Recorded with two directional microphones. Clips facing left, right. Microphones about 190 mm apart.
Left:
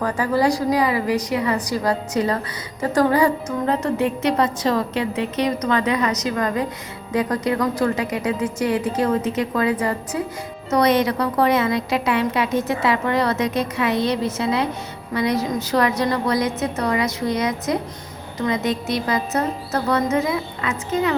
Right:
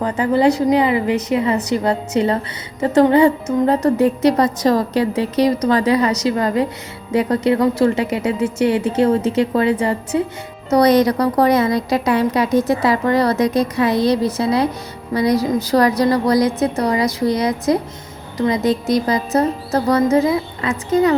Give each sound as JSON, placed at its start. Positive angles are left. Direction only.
{"t": 0.0, "sound": "a woman's voice", "side_deg": -20}
{"t": 3.7, "sound": "a woman's voice", "side_deg": -40}